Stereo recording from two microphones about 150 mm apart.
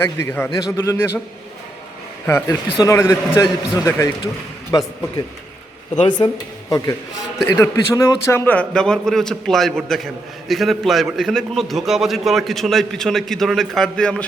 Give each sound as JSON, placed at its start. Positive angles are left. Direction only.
{"t": 0.0, "sound": "a man's voice", "side_deg": 15}
{"t": 2.2, "sound": "a man's voice", "side_deg": 15}